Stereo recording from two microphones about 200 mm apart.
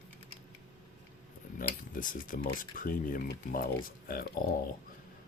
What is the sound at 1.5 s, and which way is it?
Speech, 45° left (ahead or behind).